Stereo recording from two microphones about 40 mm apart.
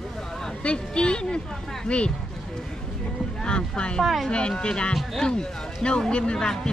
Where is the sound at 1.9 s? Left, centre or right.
Left.